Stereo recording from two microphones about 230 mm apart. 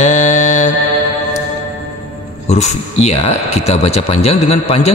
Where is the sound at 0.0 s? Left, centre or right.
Left.